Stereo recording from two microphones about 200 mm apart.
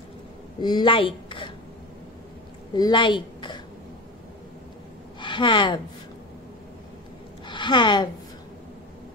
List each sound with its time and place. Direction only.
0.6 s a woman's voice: 20° left (ahead or behind)
2.7 s a woman's voice: 20° left (ahead or behind)
5.2 s a woman's voice: 25° left (ahead or behind)
7.4 s a woman's voice: 25° left (ahead or behind)